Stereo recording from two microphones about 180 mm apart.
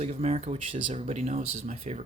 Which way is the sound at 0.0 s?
40° right (ahead or behind).